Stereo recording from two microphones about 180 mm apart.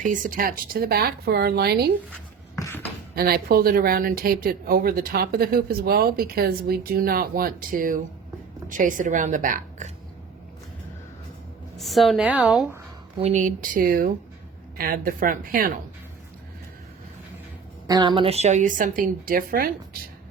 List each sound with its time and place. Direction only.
0.0 s speech: 45° right (ahead or behind); by 1.9 s 60° right (ahead or behind)
2.6 s beatboxing: 15° left (ahead or behind)
3.2 s a woman's voice: 60° right (ahead or behind)
11.8 s a woman's voice: centre (ahead or behind)
13.1 s a woman's voice: 40° right (ahead or behind)
17.8 s a woman's voice: 25° right (ahead or behind); by 19.7 s 55° right (ahead or behind)